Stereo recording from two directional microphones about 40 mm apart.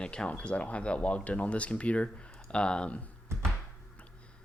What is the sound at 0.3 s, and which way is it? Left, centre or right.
Speech, left.